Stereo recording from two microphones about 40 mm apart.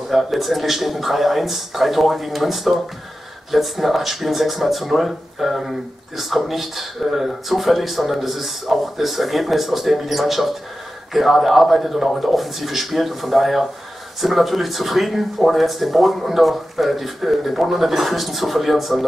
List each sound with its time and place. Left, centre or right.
0.1 s speech: centre